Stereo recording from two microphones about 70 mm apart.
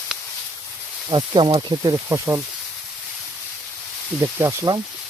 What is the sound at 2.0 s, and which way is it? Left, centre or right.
Speech, right.